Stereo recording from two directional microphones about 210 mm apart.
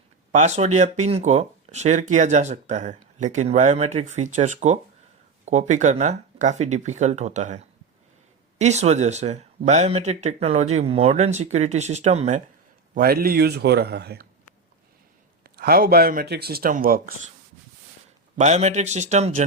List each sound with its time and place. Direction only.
0.3 s speech: 35° right (ahead or behind)
12.9 s speech: 45° right (ahead or behind)
15.5 s speech: 45° right (ahead or behind)
18.3 s speech: 30° right (ahead or behind)